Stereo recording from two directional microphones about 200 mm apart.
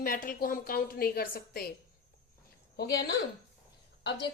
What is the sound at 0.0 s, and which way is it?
A woman's voice, 45° left (ahead or behind).